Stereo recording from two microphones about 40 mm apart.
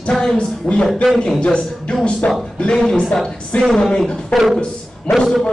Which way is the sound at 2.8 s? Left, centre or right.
Centre.